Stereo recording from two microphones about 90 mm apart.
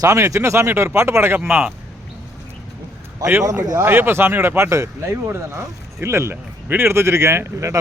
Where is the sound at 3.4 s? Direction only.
35° right (ahead or behind).